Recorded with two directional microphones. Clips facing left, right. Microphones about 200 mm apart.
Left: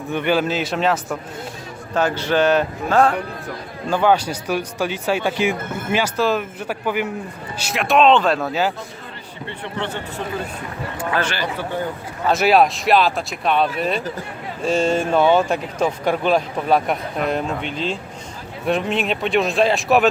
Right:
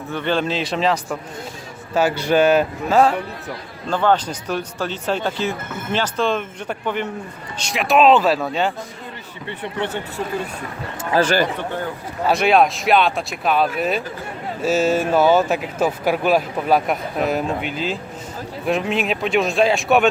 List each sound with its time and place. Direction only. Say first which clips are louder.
0.1 s speech: left 2 dB; 10° left (ahead or behind); by 3.2 s 5° right (ahead or behind)
3.8 s speech: left 1 dB; 10° left (ahead or behind)
9.5 s speech: right 2 dB; 15° right (ahead or behind)
11.1 s a man's voice: right 6 dB; 35° right (ahead or behind)
12.3 s speech: even; 5° left (ahead or behind)